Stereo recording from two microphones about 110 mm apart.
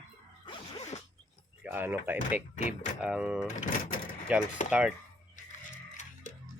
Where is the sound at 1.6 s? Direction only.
20° right (ahead or behind).